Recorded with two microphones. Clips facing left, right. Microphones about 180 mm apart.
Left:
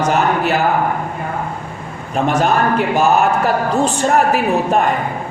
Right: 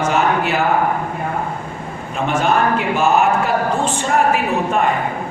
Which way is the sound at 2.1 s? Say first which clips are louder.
Left 2 dB; 40° left (ahead or behind).